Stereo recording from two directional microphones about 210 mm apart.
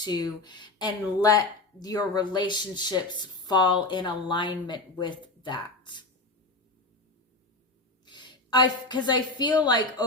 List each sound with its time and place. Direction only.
0.0 s speech: 20° left (ahead or behind)
8.0 s a woman's voice: 20° left (ahead or behind)